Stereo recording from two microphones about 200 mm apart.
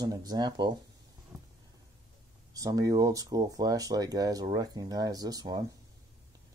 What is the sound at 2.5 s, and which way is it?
Speech, 15° right (ahead or behind).